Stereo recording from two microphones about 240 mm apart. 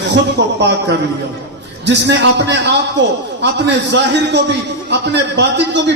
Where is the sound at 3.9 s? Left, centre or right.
Right.